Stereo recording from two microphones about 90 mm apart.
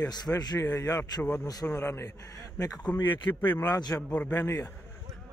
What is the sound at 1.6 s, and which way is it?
Speech, 30° left (ahead or behind).